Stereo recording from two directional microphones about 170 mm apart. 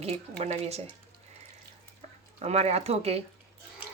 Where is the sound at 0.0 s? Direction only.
35° right (ahead or behind).